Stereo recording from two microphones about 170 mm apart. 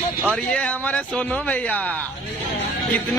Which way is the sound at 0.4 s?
5° left (ahead or behind).